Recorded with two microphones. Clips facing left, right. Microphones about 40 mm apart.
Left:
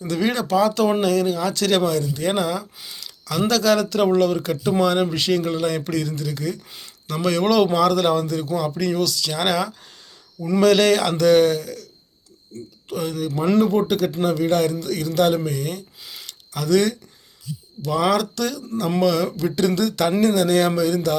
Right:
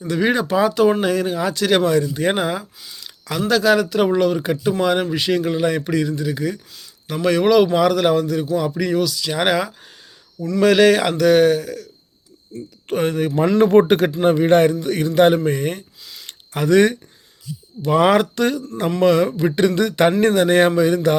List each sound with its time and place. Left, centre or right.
0.1 s a man's voice: centre
3.0 s a sound: centre
3.5 s a man's voice: centre
12.9 s speech: right
14.3 s speech: right
16.2 s a sound: right
17.8 s speech: right